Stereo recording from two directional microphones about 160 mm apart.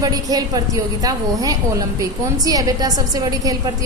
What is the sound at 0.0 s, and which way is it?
A woman's voice, 25° right (ahead or behind).